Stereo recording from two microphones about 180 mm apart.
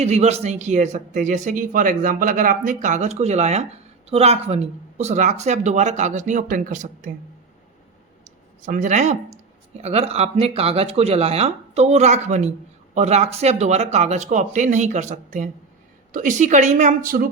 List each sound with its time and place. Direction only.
0.0 s speech: 40° right (ahead or behind)
8.6 s a woman's voice: 45° right (ahead or behind)